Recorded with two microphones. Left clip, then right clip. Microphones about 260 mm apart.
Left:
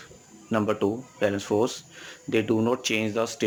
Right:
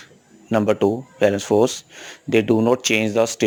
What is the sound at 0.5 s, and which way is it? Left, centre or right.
Speech, right.